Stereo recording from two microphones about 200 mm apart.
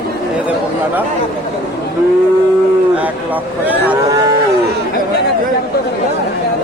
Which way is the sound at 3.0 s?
10° right (ahead or behind).